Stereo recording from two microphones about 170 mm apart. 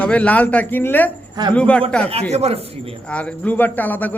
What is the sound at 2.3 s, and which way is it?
Speech, 40° right (ahead or behind).